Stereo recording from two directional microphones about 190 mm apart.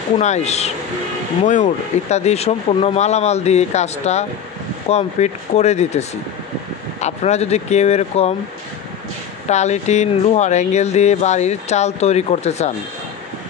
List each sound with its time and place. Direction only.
0.2 s speech: 35° left (ahead or behind)
9.5 s speech: 35° left (ahead or behind)